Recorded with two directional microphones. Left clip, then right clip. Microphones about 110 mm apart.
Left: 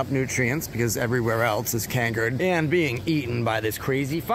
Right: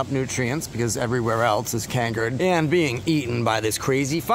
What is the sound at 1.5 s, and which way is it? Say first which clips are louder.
Speech: right 3 dB; 60° right (ahead or behind).